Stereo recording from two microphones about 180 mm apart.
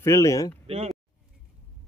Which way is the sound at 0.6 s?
35° right (ahead or behind).